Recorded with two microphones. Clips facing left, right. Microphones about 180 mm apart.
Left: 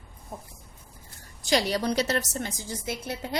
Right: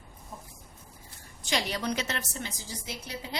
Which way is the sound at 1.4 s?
40° left (ahead or behind).